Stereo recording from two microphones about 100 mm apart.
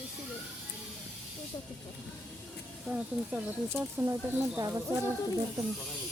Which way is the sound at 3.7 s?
20° right (ahead or behind).